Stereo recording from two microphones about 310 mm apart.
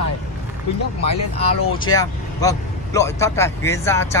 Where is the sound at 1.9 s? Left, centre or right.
Centre.